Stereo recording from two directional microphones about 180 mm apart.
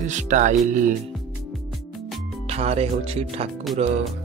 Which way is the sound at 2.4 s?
35° right (ahead or behind).